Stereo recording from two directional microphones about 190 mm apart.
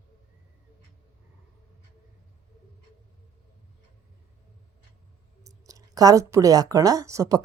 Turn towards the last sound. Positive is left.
turn(degrees=-20)  # may be behind; listen again after turning